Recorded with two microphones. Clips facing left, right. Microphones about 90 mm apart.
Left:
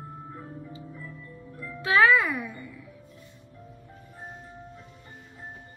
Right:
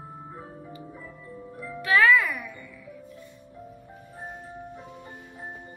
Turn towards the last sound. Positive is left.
turn(degrees=-15)  # may be behind; listen again after turning